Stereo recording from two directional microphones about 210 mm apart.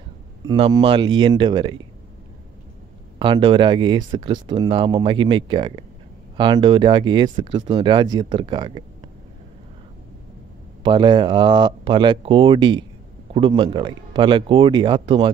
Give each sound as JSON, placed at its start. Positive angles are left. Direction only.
{"t": 0.5, "sound": "speech", "side_deg": -20}
{"t": 3.2, "sound": "speech", "side_deg": -25}
{"t": 10.8, "sound": "speech", "side_deg": -20}